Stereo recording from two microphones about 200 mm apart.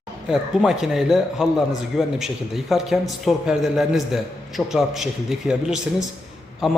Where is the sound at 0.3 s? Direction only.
Centre (ahead or behind).